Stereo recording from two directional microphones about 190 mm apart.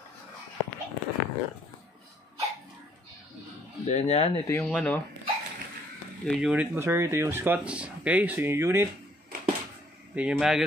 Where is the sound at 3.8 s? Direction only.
35° left (ahead or behind).